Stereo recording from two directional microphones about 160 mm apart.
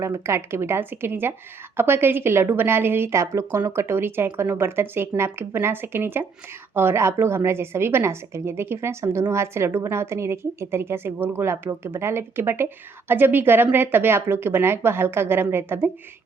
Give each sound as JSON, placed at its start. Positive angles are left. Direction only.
{"t": 0.0, "sound": "a woman's voice", "side_deg": -20}